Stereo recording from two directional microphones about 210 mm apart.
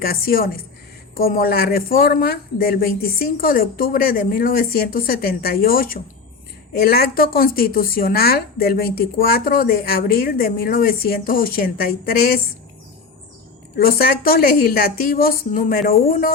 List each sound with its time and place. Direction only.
0.0 s a woman's voice: 45° left (ahead or behind)
13.7 s a woman's voice: 45° left (ahead or behind)